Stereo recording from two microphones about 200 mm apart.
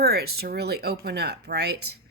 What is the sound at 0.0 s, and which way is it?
A woman's voice, 50° right (ahead or behind).